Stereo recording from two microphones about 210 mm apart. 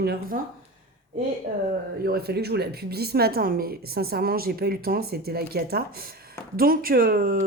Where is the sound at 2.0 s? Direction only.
50° right (ahead or behind).